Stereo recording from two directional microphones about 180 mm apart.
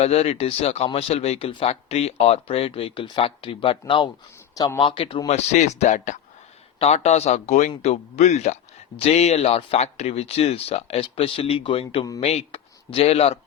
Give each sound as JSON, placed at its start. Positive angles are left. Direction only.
{"t": 0.0, "sound": "speech", "side_deg": 35}